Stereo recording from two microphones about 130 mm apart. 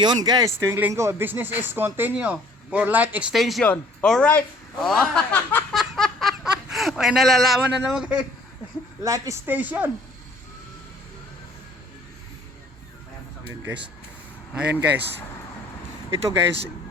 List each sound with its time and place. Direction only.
0.0 s speech: 30° right (ahead or behind); by 3.3 s 10° right (ahead or behind)
3.3 s speech: centre (ahead or behind)
5.3 s a sound: 15° left (ahead or behind)
5.7 s snicker: centre (ahead or behind)
9.0 s speech: 25° right (ahead or behind)
9.5 s speech: 15° right (ahead or behind)
14.5 s speech: 15° right (ahead or behind)